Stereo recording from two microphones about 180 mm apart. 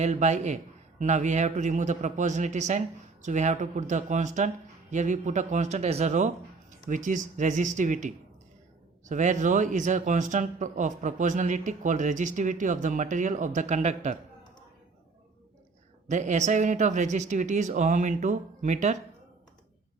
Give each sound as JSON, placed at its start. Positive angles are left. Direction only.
{"t": 0.0, "sound": "a man's voice", "side_deg": -40}
{"t": 16.0, "sound": "a man's voice", "side_deg": -40}